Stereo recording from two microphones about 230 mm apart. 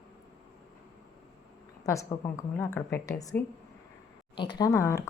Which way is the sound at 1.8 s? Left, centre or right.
Centre.